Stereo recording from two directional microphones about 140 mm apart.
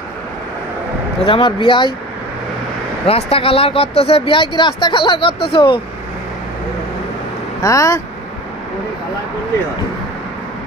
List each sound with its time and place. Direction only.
1.2 s speech: 40° left (ahead or behind)
3.1 s speech: 45° left (ahead or behind)
7.6 s speech: 25° left (ahead or behind)